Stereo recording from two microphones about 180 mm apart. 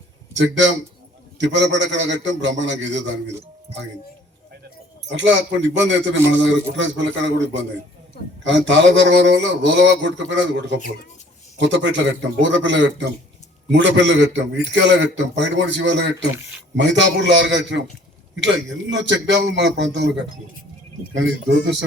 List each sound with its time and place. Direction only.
0.3 s a man's voice: 90° right
5.1 s a man's voice: 90° right
18.3 s a man's voice: 90° right